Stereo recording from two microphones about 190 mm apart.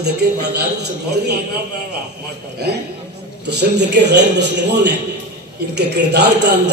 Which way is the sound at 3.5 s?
65° right (ahead or behind).